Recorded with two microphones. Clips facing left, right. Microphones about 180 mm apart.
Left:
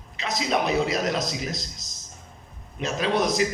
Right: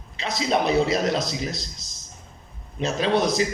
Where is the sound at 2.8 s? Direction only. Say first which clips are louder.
Right 2 dB; 30° right (ahead or behind).